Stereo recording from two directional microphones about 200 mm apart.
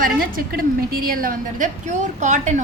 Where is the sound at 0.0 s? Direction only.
45° right (ahead or behind).